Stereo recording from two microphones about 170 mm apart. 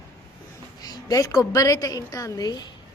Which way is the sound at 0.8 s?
20° left (ahead or behind).